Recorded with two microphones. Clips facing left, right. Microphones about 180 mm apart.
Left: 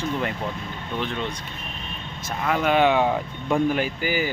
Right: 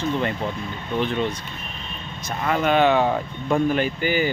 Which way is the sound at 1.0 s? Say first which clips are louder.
Right 6 dB; centre (ahead or behind).